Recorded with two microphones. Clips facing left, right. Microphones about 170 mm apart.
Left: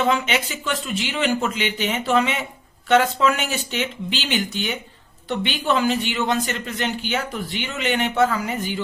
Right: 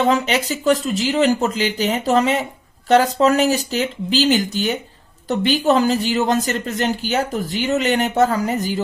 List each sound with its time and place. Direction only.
0.0 s speech: 40° right (ahead or behind)